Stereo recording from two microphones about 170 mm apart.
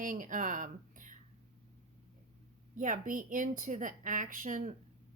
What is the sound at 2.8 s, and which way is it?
Speech, 50° right (ahead or behind).